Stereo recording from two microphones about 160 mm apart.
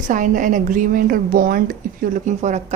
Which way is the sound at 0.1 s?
55° right (ahead or behind).